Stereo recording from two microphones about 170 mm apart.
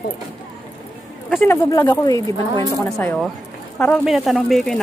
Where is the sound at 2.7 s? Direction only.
10° left (ahead or behind).